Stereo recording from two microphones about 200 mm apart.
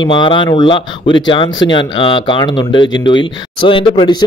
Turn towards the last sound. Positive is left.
turn(degrees=20)  # may be behind; listen again after turning